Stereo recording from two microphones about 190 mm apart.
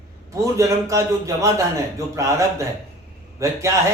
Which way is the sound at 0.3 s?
15° right (ahead or behind).